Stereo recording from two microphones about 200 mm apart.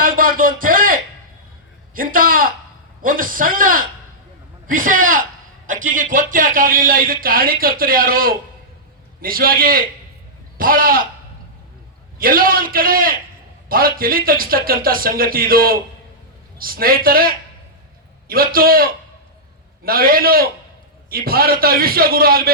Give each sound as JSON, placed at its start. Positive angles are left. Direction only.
{"t": 0.0, "sound": "a sound", "side_deg": -45}
{"t": 2.0, "sound": "a man's voice", "side_deg": -45}
{"t": 12.2, "sound": "speech", "side_deg": -45}